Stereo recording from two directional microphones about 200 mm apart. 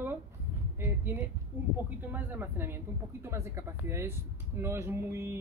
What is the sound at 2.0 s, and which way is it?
A woman's voice, 10° right (ahead or behind).